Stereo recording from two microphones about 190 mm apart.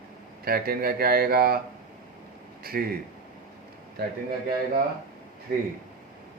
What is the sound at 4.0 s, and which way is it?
Speech, 55° right (ahead or behind).